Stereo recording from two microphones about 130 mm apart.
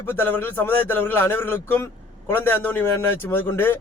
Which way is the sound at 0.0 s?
15° left (ahead or behind).